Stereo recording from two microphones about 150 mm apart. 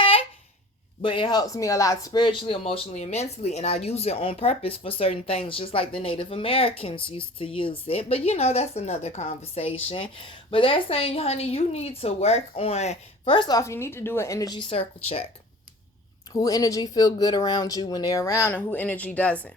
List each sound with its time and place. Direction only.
0.0 s a sound: 35° left (ahead or behind)
1.0 s a woman's voice: 35° left (ahead or behind)
16.3 s speech: 25° left (ahead or behind); by 19.5 s 10° left (ahead or behind)